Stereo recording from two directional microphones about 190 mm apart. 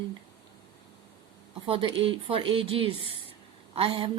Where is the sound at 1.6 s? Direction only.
25° right (ahead or behind).